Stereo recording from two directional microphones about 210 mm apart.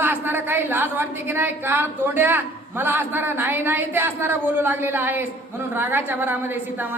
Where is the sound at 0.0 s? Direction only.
10° right (ahead or behind).